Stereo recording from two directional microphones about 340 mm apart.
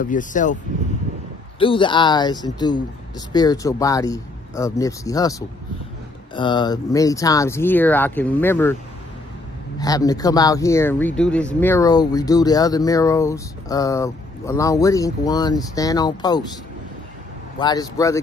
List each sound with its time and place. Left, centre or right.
0.0 s speech: left
1.6 s speech: centre
9.8 s speech: centre
17.6 s speech: centre